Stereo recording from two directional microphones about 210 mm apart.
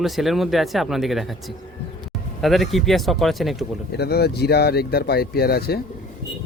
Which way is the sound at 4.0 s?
50° left (ahead or behind).